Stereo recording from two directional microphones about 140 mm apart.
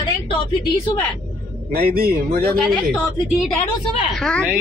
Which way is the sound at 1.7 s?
90° right.